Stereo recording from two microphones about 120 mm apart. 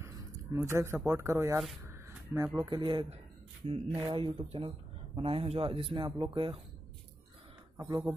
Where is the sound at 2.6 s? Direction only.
40° right (ahead or behind).